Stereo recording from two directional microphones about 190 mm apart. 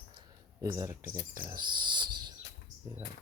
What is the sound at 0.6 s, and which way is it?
Speech, 15° right (ahead or behind).